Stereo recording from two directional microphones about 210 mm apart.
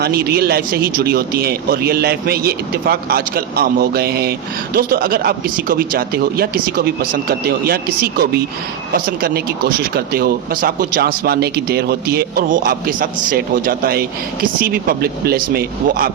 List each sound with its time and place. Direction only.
0.0 s speech: 50° right (ahead or behind)